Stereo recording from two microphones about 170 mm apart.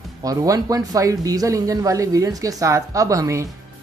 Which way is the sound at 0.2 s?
20° right (ahead or behind).